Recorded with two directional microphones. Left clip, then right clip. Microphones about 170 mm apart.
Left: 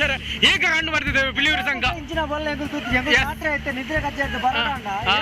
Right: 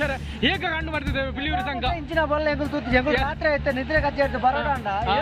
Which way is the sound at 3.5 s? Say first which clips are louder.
Right 2 dB; 25° right (ahead or behind).